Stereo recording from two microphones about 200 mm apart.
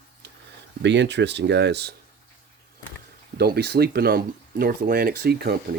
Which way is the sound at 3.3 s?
55° right (ahead or behind).